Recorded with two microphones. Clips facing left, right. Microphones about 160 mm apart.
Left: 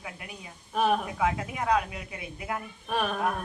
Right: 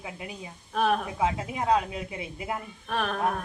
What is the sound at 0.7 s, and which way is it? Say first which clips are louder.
Speech: even; 5° left (ahead or behind).